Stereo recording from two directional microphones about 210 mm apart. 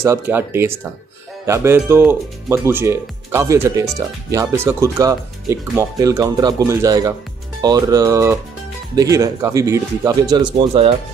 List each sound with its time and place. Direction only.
0.0 s speech: 10° right (ahead or behind)